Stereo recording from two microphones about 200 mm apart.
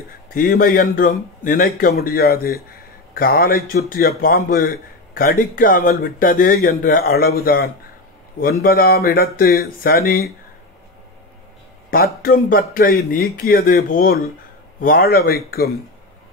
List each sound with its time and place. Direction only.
0.3 s a man's voice: 45° left (ahead or behind)
11.9 s a man's voice: 45° left (ahead or behind)